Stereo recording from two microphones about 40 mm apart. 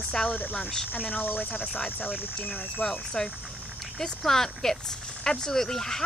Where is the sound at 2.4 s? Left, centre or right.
Left.